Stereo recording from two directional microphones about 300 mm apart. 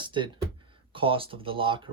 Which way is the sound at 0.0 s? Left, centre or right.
Centre.